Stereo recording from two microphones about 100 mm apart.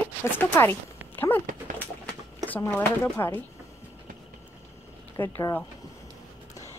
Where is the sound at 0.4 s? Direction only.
25° left (ahead or behind).